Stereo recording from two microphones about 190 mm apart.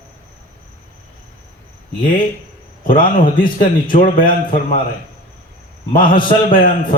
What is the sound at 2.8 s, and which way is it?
A man's voice, 45° left (ahead or behind).